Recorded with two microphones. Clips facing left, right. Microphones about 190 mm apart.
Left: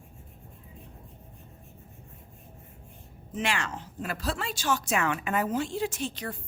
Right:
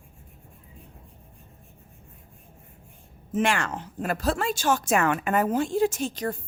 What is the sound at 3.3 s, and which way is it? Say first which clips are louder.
A woman's voice: right 6 dB; 50° right (ahead or behind).